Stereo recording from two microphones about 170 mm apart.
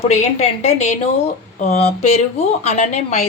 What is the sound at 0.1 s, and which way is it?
Speech, 40° left (ahead or behind).